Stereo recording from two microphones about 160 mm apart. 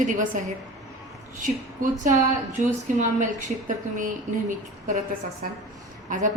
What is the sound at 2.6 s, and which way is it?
A woman's voice, 50° right (ahead or behind).